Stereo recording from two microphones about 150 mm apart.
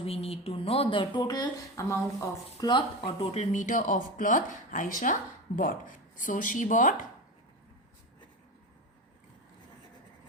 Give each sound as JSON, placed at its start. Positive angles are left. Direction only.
{"t": 0.0, "sound": "speech", "side_deg": 40}
{"t": 3.2, "sound": "speech", "side_deg": 50}